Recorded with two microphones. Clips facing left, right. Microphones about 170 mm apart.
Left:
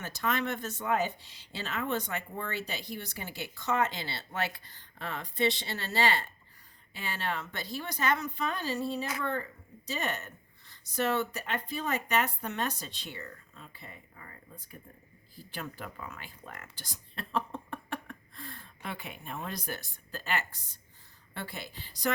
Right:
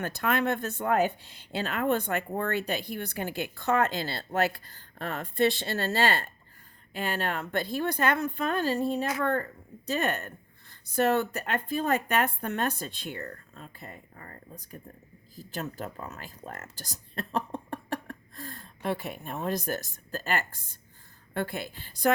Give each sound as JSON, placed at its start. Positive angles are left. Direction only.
{"t": 0.0, "sound": "a woman's voice", "side_deg": -55}